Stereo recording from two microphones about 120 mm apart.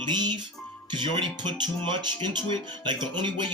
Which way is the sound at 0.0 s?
40° right (ahead or behind).